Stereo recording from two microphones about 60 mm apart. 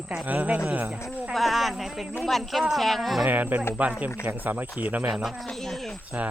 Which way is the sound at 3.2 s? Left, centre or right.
Right.